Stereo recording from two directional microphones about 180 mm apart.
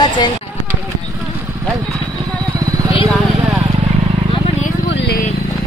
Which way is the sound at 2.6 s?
20° right (ahead or behind).